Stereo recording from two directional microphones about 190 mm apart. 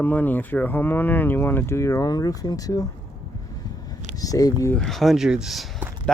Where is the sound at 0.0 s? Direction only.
10° left (ahead or behind).